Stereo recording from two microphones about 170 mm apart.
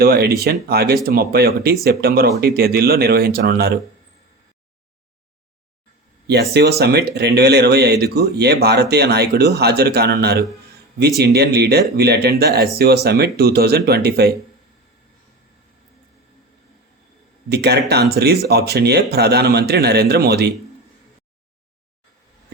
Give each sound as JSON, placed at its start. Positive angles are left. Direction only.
{"t": 0.0, "sound": "speech", "side_deg": -65}
{"t": 6.2, "sound": "speech", "side_deg": -75}
{"t": 17.5, "sound": "speech", "side_deg": -70}